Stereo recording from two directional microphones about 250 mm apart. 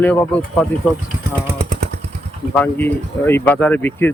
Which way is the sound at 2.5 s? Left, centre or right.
Centre.